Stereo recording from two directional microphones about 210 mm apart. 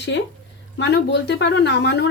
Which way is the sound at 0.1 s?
55° left (ahead or behind).